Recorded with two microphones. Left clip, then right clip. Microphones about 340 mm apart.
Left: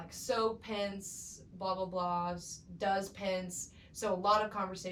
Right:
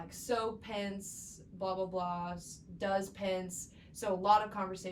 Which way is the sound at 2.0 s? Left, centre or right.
Right.